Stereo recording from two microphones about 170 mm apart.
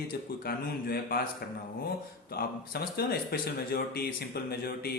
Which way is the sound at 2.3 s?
65° left (ahead or behind).